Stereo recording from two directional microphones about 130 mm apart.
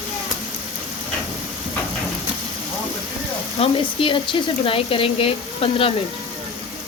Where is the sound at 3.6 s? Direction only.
45° left (ahead or behind).